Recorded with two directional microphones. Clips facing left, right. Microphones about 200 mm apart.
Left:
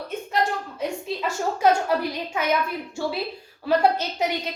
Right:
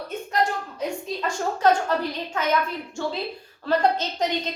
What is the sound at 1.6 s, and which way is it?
Speech, 10° left (ahead or behind).